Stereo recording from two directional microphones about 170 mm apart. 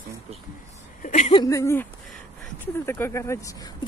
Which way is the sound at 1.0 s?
40° left (ahead or behind).